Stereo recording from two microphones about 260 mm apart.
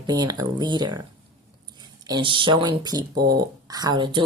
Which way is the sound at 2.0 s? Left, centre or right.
Centre.